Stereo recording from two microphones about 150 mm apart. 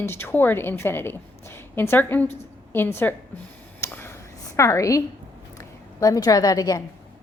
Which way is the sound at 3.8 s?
15° left (ahead or behind).